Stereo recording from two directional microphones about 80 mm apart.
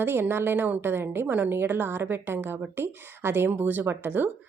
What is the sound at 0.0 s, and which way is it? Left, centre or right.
Speech, right.